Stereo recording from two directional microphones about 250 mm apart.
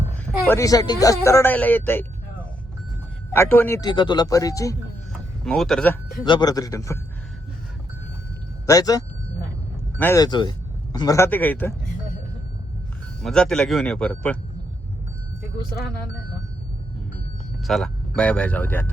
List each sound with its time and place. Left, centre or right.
0.1 s speech: centre
5.5 s speech: centre
6.2 s speech: centre
8.6 s speech: centre
13.2 s speech: centre
17.7 s speech: centre